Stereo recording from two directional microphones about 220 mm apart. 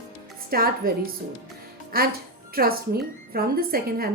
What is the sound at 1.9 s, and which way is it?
A woman's voice, 40° right (ahead or behind).